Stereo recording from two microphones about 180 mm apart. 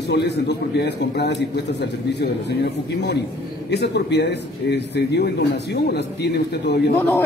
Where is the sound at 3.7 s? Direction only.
70° left (ahead or behind).